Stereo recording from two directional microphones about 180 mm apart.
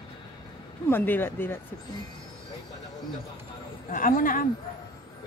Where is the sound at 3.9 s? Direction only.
50° left (ahead or behind).